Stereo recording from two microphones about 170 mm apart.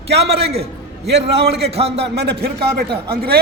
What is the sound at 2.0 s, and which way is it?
Speech, 75° right (ahead or behind).